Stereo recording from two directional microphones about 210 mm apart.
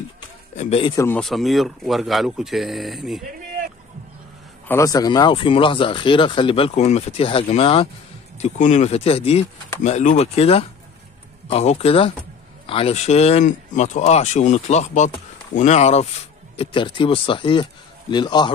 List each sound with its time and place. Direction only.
0.6 s speech: 30° left (ahead or behind)
0.9 s speech: 10° left (ahead or behind)
1.2 s speech: centre (ahead or behind)
4.6 s speech: 15° left (ahead or behind)